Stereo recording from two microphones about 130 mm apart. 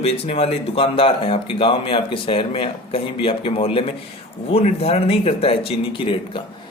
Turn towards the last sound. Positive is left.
turn(degrees=45)  # may be behind; listen again after turning